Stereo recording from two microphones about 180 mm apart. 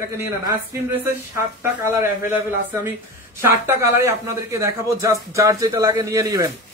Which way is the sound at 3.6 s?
15° right (ahead or behind).